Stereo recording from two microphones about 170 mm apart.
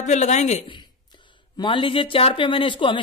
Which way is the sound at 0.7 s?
25° left (ahead or behind).